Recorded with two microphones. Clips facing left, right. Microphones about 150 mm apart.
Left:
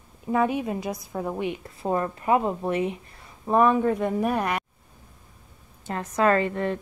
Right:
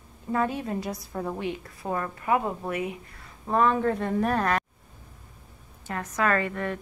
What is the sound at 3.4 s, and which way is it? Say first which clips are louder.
Speech: left 3 dB; 15° left (ahead or behind).